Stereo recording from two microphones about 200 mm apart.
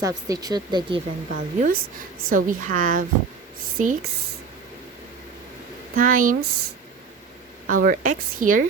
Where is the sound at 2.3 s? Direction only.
45° right (ahead or behind).